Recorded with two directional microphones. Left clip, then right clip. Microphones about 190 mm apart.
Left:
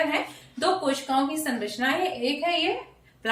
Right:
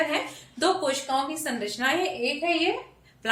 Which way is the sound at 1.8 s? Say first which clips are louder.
Right 1 dB; 20° right (ahead or behind).